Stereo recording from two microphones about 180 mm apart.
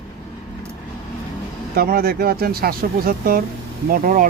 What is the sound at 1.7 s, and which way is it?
Speech, 55° right (ahead or behind).